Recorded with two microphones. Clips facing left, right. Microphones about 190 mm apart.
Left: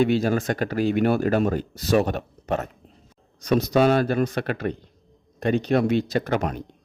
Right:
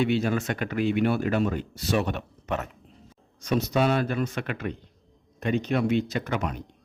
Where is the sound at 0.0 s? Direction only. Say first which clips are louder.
Left 4 dB; 40° left (ahead or behind).